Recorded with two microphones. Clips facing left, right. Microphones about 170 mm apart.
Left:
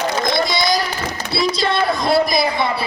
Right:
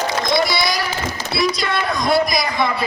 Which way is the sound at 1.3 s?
30° left (ahead or behind).